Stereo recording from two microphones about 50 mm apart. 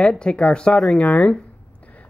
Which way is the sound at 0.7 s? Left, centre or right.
Centre.